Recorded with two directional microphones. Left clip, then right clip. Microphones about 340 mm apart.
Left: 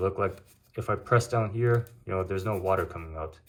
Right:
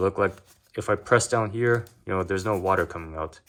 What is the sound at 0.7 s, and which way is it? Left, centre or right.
Speech, centre.